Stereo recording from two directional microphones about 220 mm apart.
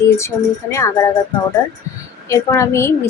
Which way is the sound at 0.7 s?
15° left (ahead or behind).